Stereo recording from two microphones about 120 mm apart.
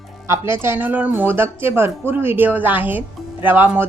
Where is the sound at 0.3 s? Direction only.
20° right (ahead or behind).